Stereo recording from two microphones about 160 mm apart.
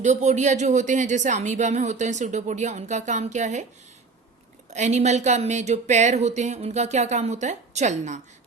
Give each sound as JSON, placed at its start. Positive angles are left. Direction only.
{"t": 0.0, "sound": "speech", "side_deg": -45}
{"t": 4.7, "sound": "speech", "side_deg": -45}